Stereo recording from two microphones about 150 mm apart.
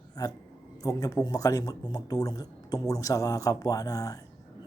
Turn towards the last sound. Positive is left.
turn(degrees=25)  # may be behind; listen again after turning